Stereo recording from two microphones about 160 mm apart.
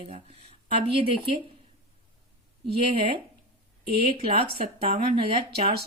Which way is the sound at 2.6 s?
40° right (ahead or behind).